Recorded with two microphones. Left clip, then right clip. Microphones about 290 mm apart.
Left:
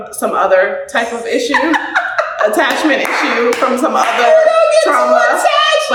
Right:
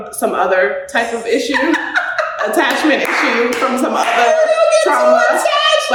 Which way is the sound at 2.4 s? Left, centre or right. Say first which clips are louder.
Left 3 dB; centre.